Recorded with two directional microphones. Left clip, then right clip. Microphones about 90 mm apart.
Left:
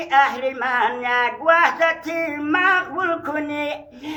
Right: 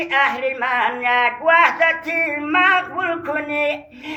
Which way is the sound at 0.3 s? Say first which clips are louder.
Right 2 dB; 50° left (ahead or behind).